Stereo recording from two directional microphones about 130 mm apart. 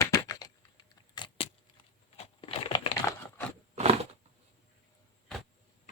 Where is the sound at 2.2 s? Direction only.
50° left (ahead or behind).